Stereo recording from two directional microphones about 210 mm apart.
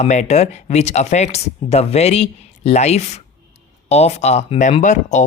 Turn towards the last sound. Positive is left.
turn(degrees=35)  # may be behind; listen again after turning